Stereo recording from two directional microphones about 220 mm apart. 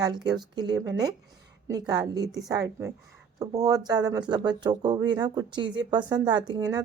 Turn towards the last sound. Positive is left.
turn(degrees=-15)  # may be behind; listen again after turning